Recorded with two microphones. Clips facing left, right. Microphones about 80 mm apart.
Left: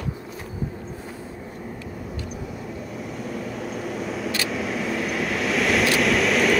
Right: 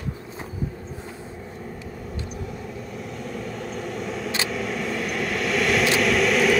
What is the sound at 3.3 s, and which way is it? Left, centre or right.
Vehicle, centre.